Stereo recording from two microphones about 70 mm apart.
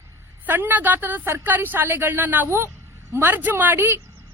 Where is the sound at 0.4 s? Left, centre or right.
Right.